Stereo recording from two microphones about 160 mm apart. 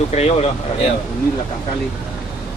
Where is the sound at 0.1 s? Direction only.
40° left (ahead or behind).